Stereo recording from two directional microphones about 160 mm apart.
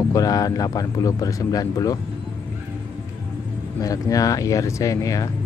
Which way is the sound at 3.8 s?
20° left (ahead or behind).